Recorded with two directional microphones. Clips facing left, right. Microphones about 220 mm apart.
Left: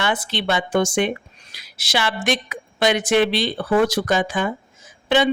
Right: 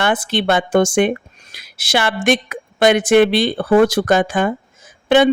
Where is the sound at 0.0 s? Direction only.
50° right (ahead or behind).